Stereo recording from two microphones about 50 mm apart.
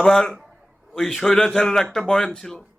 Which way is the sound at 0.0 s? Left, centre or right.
Centre.